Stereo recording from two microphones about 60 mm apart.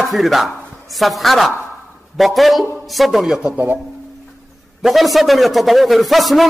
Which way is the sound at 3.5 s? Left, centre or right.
Right.